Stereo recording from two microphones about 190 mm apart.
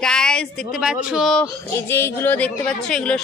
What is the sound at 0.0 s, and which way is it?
Speech, 5° left (ahead or behind).